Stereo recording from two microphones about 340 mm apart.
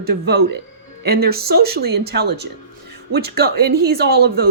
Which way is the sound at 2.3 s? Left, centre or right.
Right.